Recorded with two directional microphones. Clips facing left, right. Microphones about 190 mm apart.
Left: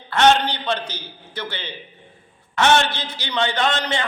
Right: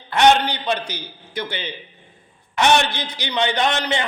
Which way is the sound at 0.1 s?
15° right (ahead or behind).